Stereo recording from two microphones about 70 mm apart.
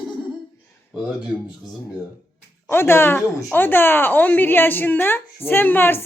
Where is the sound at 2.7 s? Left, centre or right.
Left.